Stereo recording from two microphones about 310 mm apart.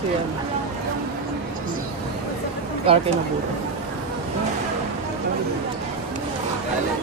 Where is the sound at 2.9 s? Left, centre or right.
Centre.